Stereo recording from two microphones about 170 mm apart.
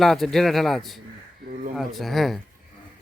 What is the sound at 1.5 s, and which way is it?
Speech, 55° right (ahead or behind).